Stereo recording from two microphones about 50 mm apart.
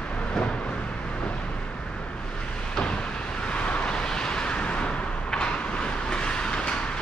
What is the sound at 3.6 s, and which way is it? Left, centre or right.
Vehicle, left.